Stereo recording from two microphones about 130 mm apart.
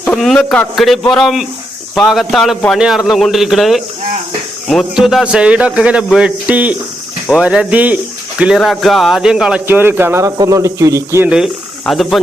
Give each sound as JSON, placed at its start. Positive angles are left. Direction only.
{"t": 0.0, "sound": "a man's voice", "side_deg": 5}
{"t": 11.9, "sound": "a man's voice", "side_deg": 0}